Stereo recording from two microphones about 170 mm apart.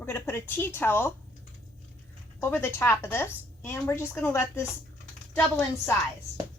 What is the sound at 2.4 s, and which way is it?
A woman's voice, 15° left (ahead or behind).